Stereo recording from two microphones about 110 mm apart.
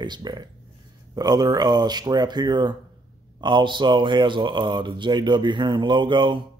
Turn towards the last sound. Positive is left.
turn(degrees=-45)  # may be behind; listen again after turning